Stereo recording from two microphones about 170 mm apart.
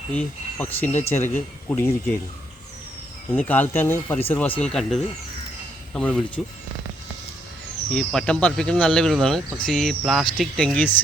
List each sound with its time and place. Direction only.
0.6 s speech: 10° left (ahead or behind)
3.3 s speech: 10° left (ahead or behind)
7.9 s speech: 5° left (ahead or behind)